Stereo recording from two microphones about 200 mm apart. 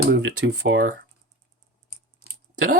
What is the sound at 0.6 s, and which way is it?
Speech, 70° right (ahead or behind).